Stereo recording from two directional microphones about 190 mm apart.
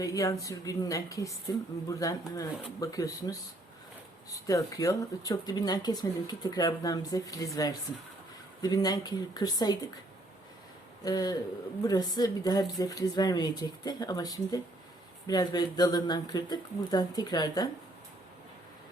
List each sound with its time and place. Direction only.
0.0 s speech: 20° left (ahead or behind)
4.4 s speech: 20° left (ahead or behind)
11.0 s speech: 20° left (ahead or behind)